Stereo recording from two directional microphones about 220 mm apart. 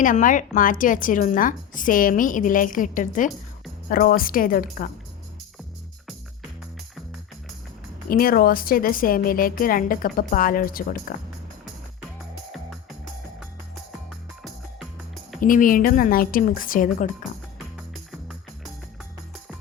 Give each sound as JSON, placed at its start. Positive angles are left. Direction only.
{"t": 0.0, "sound": "a woman's voice", "side_deg": 35}
{"t": 8.1, "sound": "a woman's voice", "side_deg": 40}
{"t": 15.4, "sound": "a woman's voice", "side_deg": 40}